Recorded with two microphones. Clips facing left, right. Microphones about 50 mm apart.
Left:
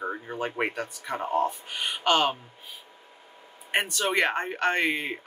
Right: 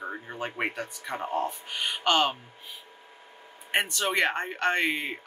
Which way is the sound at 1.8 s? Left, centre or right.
Centre.